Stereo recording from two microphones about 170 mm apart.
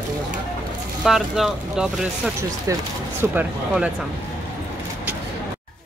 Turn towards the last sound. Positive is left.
turn(degrees=-10)  # may be behind; listen again after turning